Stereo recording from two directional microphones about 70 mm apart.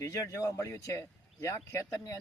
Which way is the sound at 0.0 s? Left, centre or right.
Left.